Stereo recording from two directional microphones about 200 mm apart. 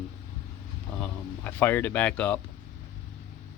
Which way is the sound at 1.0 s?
10° left (ahead or behind).